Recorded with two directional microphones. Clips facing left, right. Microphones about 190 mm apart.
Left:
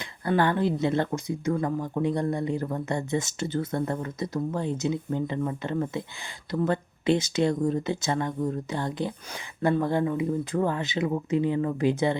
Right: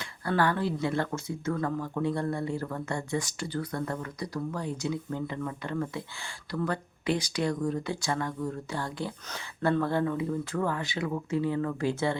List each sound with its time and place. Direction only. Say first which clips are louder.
0.0 s speech: left 3 dB; 20° left (ahead or behind)